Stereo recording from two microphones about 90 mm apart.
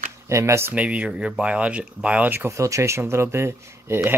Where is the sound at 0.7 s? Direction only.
15° right (ahead or behind); by 4.1 s 30° right (ahead or behind).